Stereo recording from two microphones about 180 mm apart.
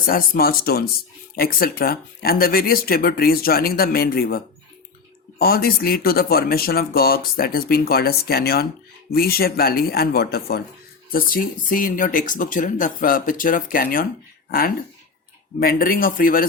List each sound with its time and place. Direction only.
0.0 s speech: 55° left (ahead or behind)
15.6 s speech: 55° left (ahead or behind)